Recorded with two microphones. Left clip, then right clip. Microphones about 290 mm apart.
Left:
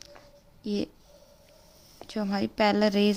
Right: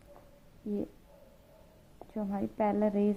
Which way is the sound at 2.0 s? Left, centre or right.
Left.